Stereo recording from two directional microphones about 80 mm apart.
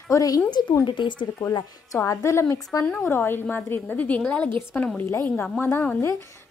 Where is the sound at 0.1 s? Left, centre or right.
Left.